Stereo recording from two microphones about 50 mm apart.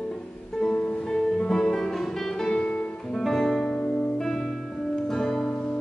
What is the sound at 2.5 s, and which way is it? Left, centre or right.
Music, left.